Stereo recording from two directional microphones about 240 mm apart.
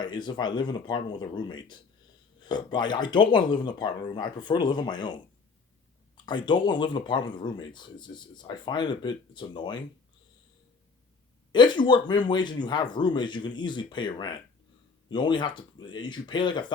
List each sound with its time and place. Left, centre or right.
0.0 s speech: centre
11.5 s speech: centre